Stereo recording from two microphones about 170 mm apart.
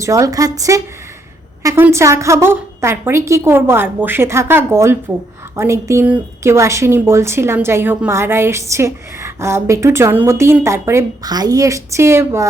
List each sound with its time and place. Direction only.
0.0 s a woman's voice: 20° right (ahead or behind)